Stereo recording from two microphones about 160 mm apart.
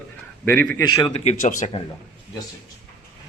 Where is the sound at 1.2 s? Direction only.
40° left (ahead or behind).